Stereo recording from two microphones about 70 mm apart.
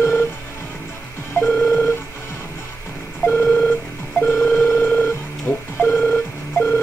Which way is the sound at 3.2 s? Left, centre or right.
Left.